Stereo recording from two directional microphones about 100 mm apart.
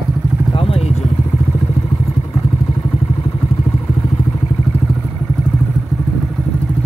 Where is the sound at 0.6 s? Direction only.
70° left (ahead or behind).